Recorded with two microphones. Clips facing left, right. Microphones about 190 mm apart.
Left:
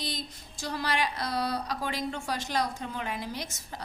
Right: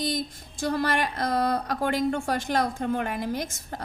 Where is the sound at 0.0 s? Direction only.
50° right (ahead or behind).